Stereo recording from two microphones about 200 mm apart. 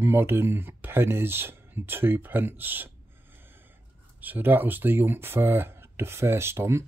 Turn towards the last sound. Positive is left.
turn(degrees=-15)  # may be behind; listen again after turning